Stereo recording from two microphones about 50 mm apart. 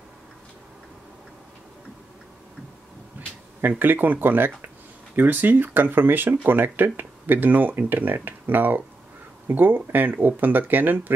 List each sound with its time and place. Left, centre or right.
3.6 s speech: right